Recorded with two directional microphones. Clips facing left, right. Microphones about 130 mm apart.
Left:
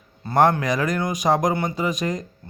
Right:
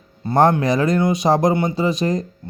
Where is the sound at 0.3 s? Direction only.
25° right (ahead or behind).